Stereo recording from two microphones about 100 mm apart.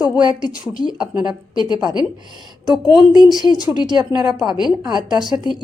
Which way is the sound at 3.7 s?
45° right (ahead or behind).